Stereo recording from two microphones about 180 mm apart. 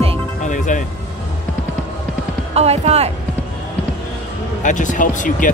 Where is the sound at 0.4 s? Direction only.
45° left (ahead or behind).